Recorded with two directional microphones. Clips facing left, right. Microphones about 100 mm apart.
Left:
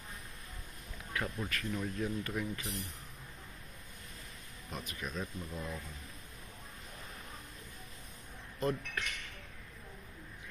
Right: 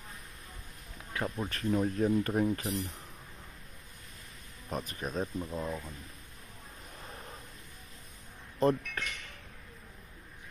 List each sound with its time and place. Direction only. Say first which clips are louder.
1.1 s speech: right 3 dB; 30° right (ahead or behind); by 2.8 s 45° right (ahead or behind)
4.6 s speech: right 6 dB; 40° right (ahead or behind)
8.5 s speech: right 7 dB; 35° right (ahead or behind)